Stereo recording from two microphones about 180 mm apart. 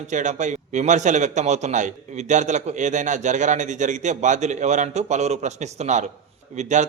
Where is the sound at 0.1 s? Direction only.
45° right (ahead or behind).